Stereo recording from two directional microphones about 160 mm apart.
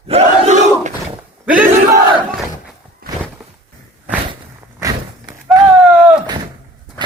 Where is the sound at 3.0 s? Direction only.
70° right (ahead or behind).